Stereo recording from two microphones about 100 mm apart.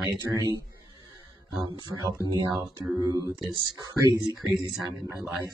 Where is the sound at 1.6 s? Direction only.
50° right (ahead or behind).